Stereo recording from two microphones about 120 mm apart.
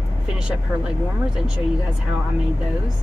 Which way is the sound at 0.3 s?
10° right (ahead or behind).